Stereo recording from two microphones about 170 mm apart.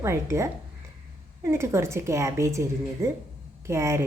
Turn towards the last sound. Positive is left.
turn(degrees=-15)  # may be behind; listen again after turning